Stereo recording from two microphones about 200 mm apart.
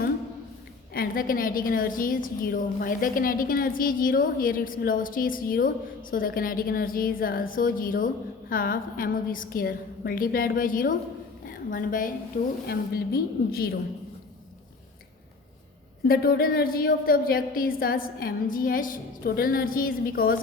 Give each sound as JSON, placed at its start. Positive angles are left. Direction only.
{"t": 0.9, "sound": "a woman's voice", "side_deg": 45}
{"t": 13.1, "sound": "a woman's voice", "side_deg": 50}
{"t": 16.0, "sound": "a woman's voice", "side_deg": 50}